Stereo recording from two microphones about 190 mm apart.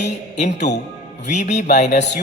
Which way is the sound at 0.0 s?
35° left (ahead or behind).